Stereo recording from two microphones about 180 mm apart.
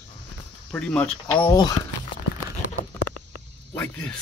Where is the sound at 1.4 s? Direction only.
20° left (ahead or behind).